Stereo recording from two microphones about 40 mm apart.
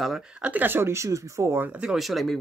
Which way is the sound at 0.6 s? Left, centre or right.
Right.